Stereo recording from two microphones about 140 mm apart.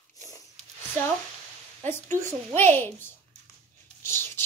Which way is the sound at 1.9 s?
15° left (ahead or behind).